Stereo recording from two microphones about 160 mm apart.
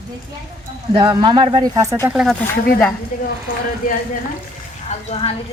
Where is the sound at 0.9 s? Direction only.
30° right (ahead or behind).